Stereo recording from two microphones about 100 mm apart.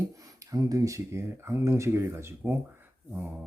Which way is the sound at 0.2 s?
35° right (ahead or behind).